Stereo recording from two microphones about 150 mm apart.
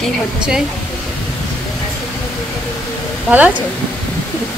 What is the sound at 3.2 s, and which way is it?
Speech, 10° right (ahead or behind).